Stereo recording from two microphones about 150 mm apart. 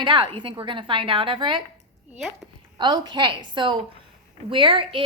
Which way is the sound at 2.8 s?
30° right (ahead or behind).